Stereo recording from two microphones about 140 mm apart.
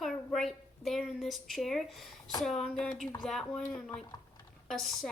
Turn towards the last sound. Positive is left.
turn(degrees=0)  # may be behind; listen again after turning